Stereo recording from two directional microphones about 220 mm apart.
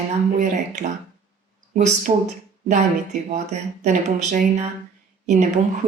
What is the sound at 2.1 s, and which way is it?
Speech, 30° right (ahead or behind).